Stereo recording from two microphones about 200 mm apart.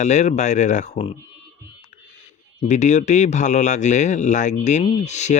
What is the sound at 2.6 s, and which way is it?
Speech, 35° left (ahead or behind).